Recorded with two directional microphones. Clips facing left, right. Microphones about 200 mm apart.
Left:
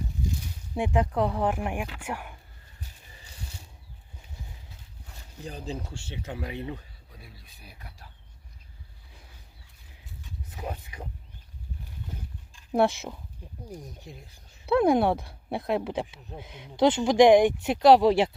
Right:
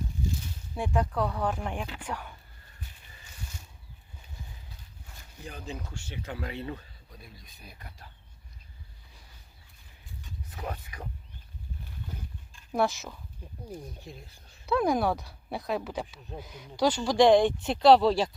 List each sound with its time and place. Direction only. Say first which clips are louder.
0.8 s speech: left 3 dB; 20° left (ahead or behind)
5.4 s speech: left 4 dB; 35° left (ahead or behind); by 8.0 s 10° left (ahead or behind)
10.5 s speech: left 1 dB; 10° left (ahead or behind)
12.7 s speech: left 4 dB; 30° left (ahead or behind)
13.7 s speech: right 1 dB; 15° left (ahead or behind)
14.7 s speech: left 4 dB; 25° left (ahead or behind)